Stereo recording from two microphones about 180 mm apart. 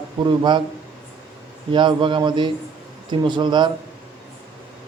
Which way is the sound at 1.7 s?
25° right (ahead or behind).